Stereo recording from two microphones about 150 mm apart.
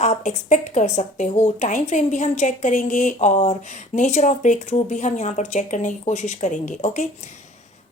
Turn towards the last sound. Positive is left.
turn(degrees=55)  # may be behind; listen again after turning